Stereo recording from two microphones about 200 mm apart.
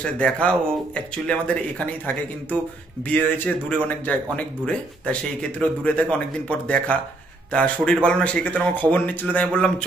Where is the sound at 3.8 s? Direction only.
5° left (ahead or behind).